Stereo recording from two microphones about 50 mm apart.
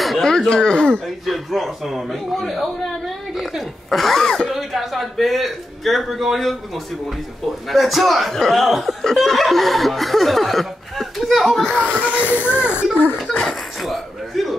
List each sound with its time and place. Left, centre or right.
0.2 s a sound: centre
1.0 s speech: centre
11.8 s speech: right
13.4 s speech: centre